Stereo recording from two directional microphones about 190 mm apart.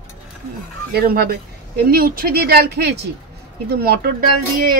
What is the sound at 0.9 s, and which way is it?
A woman's voice, 55° right (ahead or behind).